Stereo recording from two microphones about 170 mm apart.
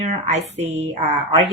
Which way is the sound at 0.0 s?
40° right (ahead or behind).